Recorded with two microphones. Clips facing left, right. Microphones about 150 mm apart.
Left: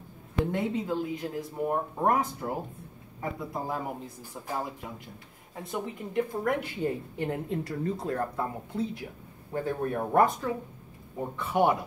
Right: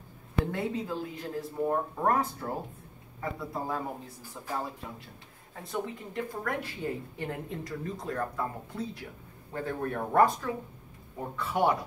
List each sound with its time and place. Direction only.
0.5 s speech: 20° left (ahead or behind)
5.7 s a woman's voice: 20° left (ahead or behind)
9.5 s a woman's voice: 20° left (ahead or behind)